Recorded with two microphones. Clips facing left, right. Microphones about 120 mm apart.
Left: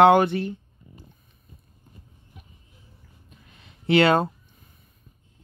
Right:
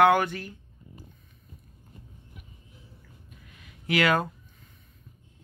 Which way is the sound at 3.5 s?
30° left (ahead or behind).